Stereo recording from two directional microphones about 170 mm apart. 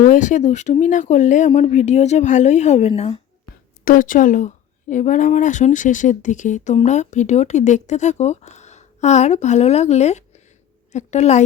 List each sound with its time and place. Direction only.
0.0 s speech: 50° left (ahead or behind)
3.8 s speech: 50° left (ahead or behind)